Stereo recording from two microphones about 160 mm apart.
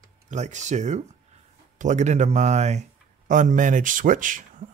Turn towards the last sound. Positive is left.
turn(degrees=-55)  # may be behind; listen again after turning